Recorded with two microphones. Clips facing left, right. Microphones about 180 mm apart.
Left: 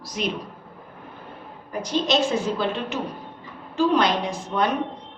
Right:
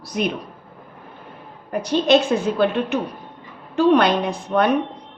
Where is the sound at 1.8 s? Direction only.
60° right (ahead or behind).